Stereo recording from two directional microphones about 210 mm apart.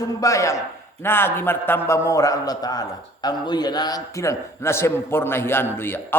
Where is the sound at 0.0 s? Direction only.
15° left (ahead or behind).